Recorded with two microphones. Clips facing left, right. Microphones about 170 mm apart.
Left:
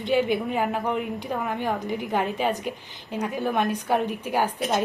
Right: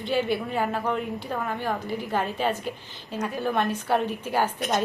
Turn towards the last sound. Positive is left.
turn(degrees=10)  # may be behind; listen again after turning